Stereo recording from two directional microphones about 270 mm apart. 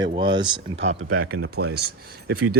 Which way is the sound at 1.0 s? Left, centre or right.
Right.